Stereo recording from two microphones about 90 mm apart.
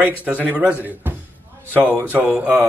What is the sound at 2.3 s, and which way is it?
Speech, 15° right (ahead or behind).